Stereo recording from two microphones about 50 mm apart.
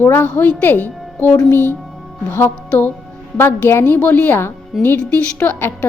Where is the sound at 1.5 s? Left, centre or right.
Left.